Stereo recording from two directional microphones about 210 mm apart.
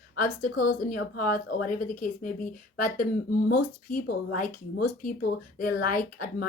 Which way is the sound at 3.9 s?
40° left (ahead or behind).